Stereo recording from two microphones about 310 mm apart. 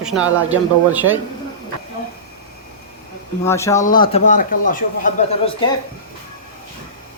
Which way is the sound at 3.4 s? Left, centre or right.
Centre.